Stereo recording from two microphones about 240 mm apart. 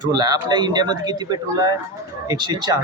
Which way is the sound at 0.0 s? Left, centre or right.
Centre.